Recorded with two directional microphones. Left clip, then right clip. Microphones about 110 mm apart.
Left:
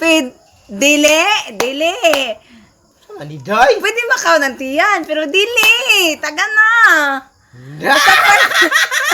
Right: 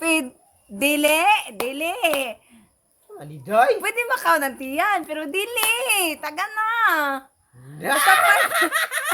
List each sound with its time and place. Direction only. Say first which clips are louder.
0.0 s a sound: left 9 dB; 30° right (ahead or behind)
0.8 s a woman's voice: left 8 dB; 35° right (ahead or behind)
2.1 s babbling: left 9 dB; 35° right (ahead or behind)
3.2 s snicker: left 6 dB; 15° right (ahead or behind)
3.8 s a woman's voice: left 8 dB; 45° right (ahead or behind)
7.8 s snicker: left 7 dB; 15° right (ahead or behind)